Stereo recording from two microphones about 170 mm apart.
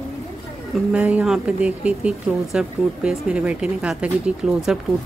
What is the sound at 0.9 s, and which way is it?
Speech, 5° right (ahead or behind).